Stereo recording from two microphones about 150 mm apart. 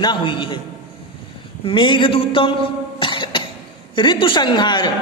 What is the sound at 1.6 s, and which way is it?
Speech, 35° left (ahead or behind).